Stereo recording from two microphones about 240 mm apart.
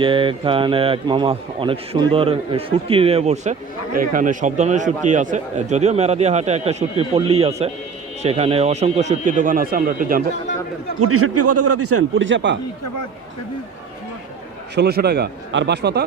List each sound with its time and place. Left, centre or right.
0.0 s a man's voice: right
11.0 s a man's voice: right
14.8 s speech: right